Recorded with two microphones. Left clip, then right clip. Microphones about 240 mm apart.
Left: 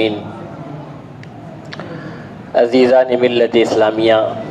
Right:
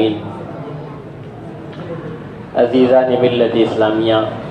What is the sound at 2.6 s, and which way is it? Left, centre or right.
A man's voice, left.